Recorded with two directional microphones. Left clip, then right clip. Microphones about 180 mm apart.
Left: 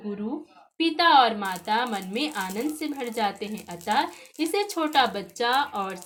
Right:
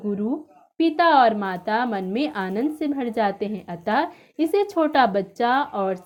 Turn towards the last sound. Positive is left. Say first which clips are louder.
# right 3 dB
turn(degrees=-40)  # may be behind; listen again after turning